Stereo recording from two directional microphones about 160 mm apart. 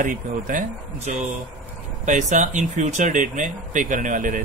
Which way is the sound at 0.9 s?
45° right (ahead or behind).